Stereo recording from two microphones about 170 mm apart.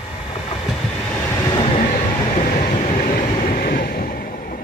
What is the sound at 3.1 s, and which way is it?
Vehicle, 55° left (ahead or behind).